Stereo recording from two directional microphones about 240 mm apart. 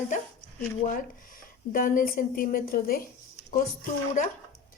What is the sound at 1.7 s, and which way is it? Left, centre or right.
A woman's voice, left.